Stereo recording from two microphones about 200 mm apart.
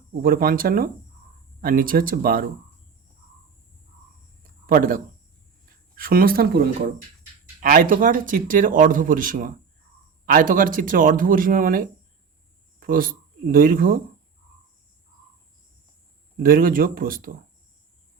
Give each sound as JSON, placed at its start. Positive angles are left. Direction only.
{"t": 0.2, "sound": "speech", "side_deg": -45}
{"t": 4.6, "sound": "speech", "side_deg": -45}
{"t": 16.4, "sound": "speech", "side_deg": -45}